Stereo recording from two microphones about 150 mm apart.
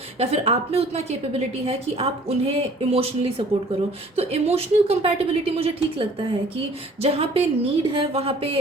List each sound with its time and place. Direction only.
0.2 s a woman's voice: 40° right (ahead or behind)